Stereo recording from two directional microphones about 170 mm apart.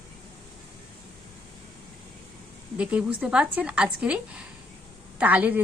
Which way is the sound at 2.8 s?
5° right (ahead or behind).